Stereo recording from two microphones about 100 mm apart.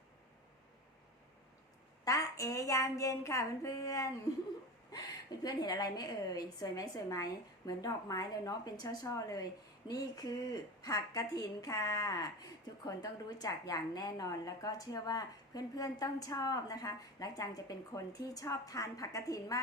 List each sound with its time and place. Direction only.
2.0 s a woman's voice: 35° left (ahead or behind)